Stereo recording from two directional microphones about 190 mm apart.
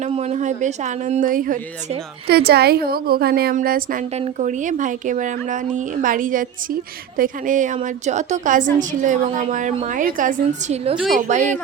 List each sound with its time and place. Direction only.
0.0 s a woman's voice: 35° right (ahead or behind)